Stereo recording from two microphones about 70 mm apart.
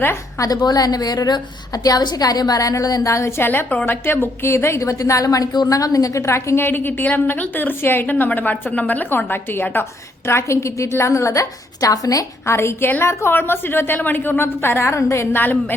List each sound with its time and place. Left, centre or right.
0.3 s a woman's voice: left
10.2 s a woman's voice: left
12.5 s a woman's voice: left
15.4 s a woman's voice: left